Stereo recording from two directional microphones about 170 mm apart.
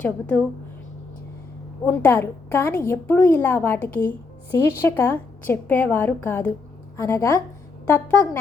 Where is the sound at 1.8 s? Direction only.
10° left (ahead or behind).